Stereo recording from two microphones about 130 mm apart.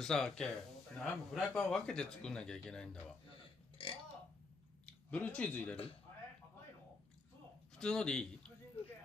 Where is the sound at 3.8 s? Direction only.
40° left (ahead or behind).